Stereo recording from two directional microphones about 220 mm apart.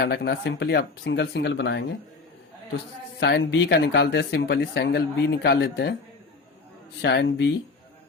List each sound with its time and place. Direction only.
0.0 s speech: 50° left (ahead or behind)
3.2 s speech: 50° left (ahead or behind)
7.0 s speech: 50° left (ahead or behind)